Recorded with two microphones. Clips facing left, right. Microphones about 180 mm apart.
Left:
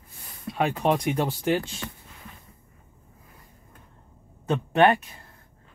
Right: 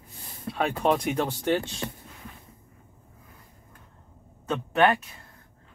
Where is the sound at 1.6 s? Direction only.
20° right (ahead or behind).